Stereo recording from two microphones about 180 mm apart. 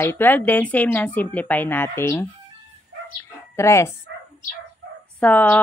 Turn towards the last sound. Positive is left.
turn(degrees=10)  # may be behind; listen again after turning